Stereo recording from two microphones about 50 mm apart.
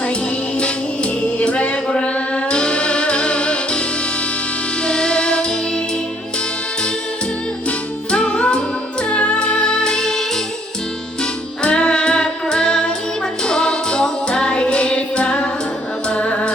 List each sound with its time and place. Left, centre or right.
0.6 s music: left
8.1 s music: centre